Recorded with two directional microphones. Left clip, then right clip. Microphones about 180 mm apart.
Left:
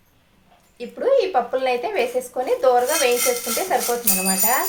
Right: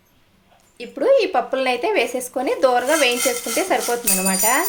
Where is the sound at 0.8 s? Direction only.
60° right (ahead or behind).